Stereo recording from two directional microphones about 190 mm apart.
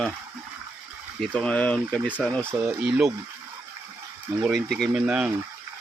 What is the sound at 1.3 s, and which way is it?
Speech, 5° left (ahead or behind).